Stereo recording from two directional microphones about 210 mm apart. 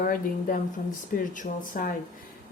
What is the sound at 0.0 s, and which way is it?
Speech, 40° left (ahead or behind).